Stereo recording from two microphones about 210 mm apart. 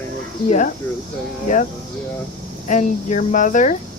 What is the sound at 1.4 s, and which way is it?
Speech, 35° left (ahead or behind).